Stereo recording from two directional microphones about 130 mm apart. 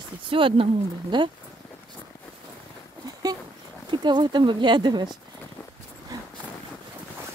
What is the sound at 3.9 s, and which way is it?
Speech, 35° right (ahead or behind).